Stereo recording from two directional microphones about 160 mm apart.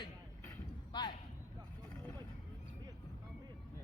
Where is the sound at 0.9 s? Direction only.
25° left (ahead or behind).